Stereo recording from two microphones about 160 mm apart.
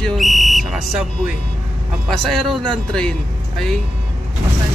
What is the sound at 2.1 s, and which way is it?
Speech, centre (ahead or behind).